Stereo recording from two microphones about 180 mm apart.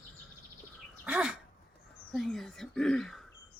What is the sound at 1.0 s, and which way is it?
Dog, 5° right (ahead or behind).